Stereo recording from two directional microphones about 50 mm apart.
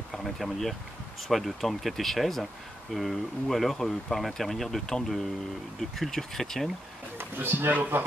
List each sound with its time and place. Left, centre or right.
0.1 s speech: centre
7.2 s speech: right